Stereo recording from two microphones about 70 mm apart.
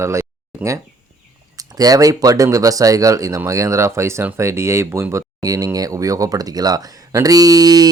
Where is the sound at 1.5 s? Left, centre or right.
Right.